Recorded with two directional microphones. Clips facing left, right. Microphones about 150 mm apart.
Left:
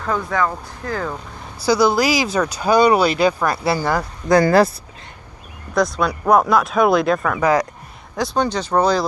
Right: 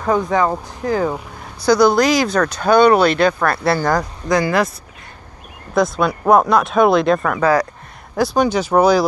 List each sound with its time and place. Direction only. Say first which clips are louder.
0.1 s speech: right 5 dB; 20° right (ahead or behind)
1.7 s speech: right 3 dB; 5° left (ahead or behind)
4.3 s speech: left 4 dB; 35° left (ahead or behind)
5.8 s speech: right 2 dB; 25° right (ahead or behind)
6.3 s speech: right 2 dB; centre (ahead or behind)
7.3 s speech: even; 15° left (ahead or behind)
8.4 s speech: right 3 dB; 5° right (ahead or behind)